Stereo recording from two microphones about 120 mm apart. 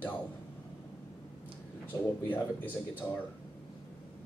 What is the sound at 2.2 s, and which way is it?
Speech, 15° left (ahead or behind).